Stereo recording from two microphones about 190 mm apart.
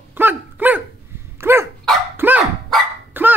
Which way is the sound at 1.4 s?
10° right (ahead or behind).